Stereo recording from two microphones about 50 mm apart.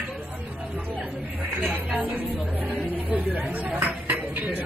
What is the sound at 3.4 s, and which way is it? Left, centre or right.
Dishes, right.